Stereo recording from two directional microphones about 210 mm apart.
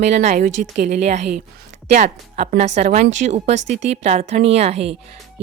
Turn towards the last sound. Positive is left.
turn(degrees=-30)  # may be behind; listen again after turning